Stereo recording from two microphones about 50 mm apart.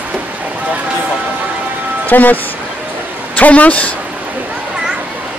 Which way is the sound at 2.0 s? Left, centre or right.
Left.